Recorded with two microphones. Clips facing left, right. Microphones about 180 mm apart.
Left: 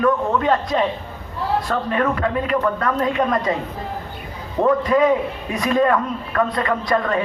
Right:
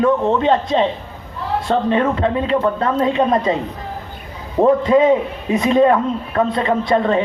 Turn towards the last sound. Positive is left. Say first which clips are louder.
# right 4 dB
turn(degrees=-25)  # may be behind; listen again after turning